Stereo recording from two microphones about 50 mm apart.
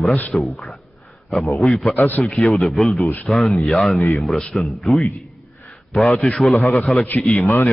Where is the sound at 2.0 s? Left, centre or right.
Left.